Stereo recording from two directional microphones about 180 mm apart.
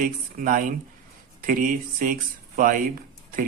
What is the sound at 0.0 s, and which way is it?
Speech, 50° right (ahead or behind).